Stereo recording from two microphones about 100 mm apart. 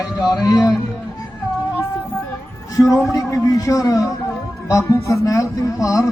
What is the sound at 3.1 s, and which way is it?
Speech, 35° left (ahead or behind).